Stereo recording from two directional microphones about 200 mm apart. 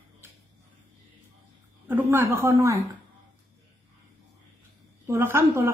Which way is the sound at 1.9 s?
10° right (ahead or behind).